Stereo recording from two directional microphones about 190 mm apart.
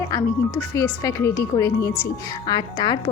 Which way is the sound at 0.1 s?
15° left (ahead or behind).